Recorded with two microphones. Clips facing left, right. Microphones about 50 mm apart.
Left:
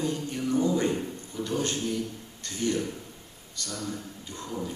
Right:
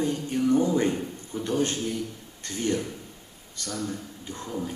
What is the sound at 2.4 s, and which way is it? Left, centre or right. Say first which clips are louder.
Speech: right 1 dB; right.